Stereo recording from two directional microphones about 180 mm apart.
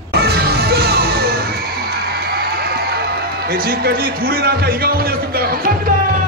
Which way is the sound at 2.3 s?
60° right (ahead or behind).